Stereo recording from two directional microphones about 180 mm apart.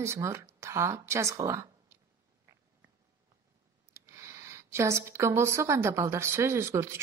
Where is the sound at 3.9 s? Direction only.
15° right (ahead or behind).